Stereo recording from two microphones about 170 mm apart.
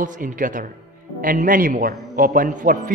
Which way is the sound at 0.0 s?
50° right (ahead or behind).